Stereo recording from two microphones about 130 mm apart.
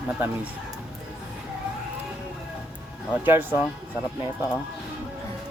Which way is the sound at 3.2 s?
15° right (ahead or behind).